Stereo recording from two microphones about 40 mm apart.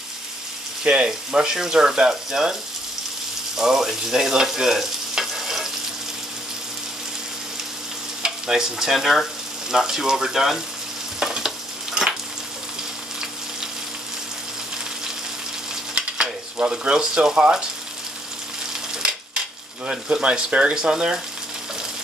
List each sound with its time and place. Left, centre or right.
0.8 s speech: right
3.5 s frying: centre
8.2 s stir: centre
8.9 s speech: centre
11.1 s frying: centre
16.0 s frying: right
16.7 s speech: right
20.2 s speech: right